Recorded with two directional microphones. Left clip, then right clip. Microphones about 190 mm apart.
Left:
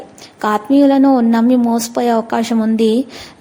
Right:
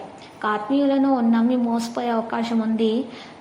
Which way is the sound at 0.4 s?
40° left (ahead or behind).